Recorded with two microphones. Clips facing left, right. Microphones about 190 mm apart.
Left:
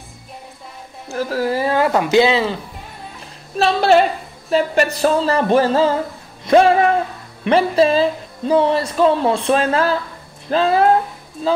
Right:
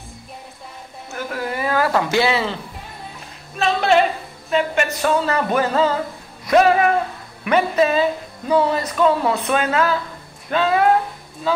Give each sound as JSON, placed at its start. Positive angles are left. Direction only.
{"t": 1.1, "sound": "speech", "side_deg": 35}
{"t": 3.5, "sound": "speech", "side_deg": 35}